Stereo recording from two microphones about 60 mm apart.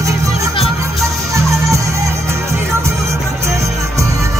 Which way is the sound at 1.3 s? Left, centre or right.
Right.